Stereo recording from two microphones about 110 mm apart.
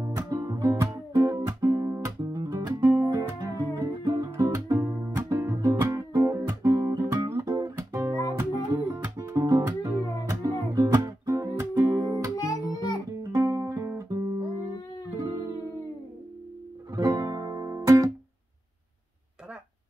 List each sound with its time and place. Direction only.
0.0 s music: 25° right (ahead or behind)
9.6 s music: 20° right (ahead or behind)
12.7 s music: 35° left (ahead or behind)
13.2 s music: 30° right (ahead or behind)
16.9 s music: 35° right (ahead or behind)